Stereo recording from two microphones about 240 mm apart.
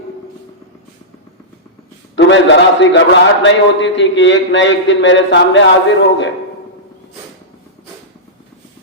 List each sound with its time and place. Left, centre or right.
2.1 s a man's voice: left